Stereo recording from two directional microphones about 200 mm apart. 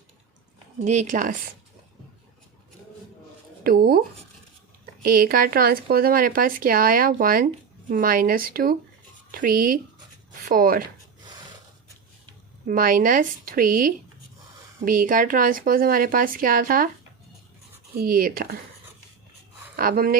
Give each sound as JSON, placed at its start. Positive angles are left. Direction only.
{"t": 0.9, "sound": "speech", "side_deg": -40}
{"t": 3.6, "sound": "speech", "side_deg": -50}
{"t": 5.0, "sound": "speech", "side_deg": -45}
{"t": 12.6, "sound": "speech", "side_deg": -45}
{"t": 17.9, "sound": "speech", "side_deg": -45}
{"t": 19.7, "sound": "speech", "side_deg": -45}